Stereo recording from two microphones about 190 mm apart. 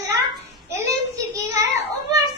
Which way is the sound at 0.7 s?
15° right (ahead or behind).